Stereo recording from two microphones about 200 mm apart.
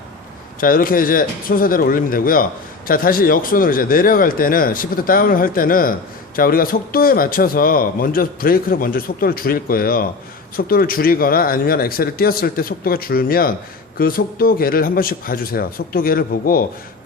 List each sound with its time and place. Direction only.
0.6 s speech: 45° left (ahead or behind)